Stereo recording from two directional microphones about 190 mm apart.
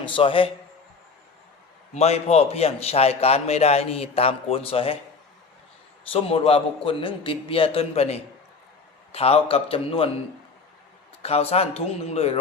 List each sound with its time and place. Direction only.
0.0 s a man's voice: 25° left (ahead or behind)
1.9 s a man's voice: 35° left (ahead or behind)
6.1 s a man's voice: 30° left (ahead or behind)
11.2 s a man's voice: 30° left (ahead or behind)